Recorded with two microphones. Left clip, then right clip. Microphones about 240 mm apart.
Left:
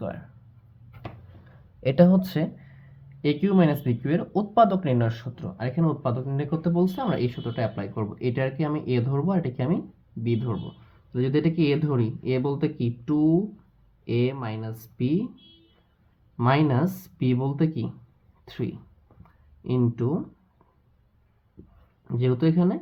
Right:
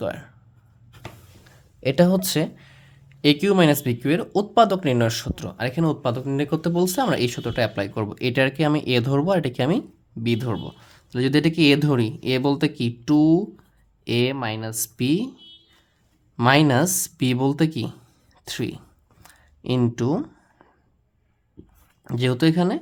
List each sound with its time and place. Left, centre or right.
0.0 s speech: right
1.8 s speech: centre; by 15.3 s right
16.4 s speech: right
19.2 s a sound: right
22.0 s speech: right